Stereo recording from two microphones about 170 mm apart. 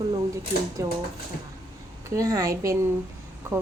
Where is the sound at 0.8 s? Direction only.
20° right (ahead or behind).